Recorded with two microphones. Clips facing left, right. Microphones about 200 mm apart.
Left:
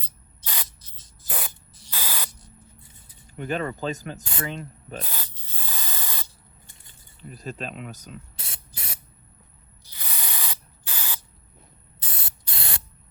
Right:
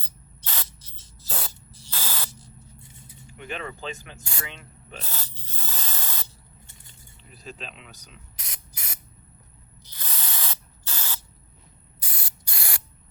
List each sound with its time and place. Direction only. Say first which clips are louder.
0.0 s spray: even; 10° left (ahead or behind)
1.9 s spray: even; 15° left (ahead or behind)
3.3 s speech: left 7 dB; 40° left (ahead or behind)
4.2 s speech: left 6 dB; 20° left (ahead or behind)
4.4 s speech: left 9 dB; 40° left (ahead or behind)
5.0 s spray: even; 15° left (ahead or behind)
7.2 s speech: left 7 dB; 45° left (ahead or behind)
8.4 s spray: left 3 dB; 30° left (ahead or behind)
9.8 s spray: even; 10° left (ahead or behind)
11.9 s spray: left 1 dB; 25° left (ahead or behind)